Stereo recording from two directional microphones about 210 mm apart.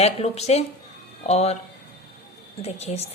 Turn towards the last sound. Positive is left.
turn(degrees=30)  # may be behind; listen again after turning